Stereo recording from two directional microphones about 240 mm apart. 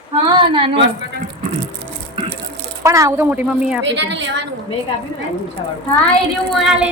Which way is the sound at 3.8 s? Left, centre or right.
Right.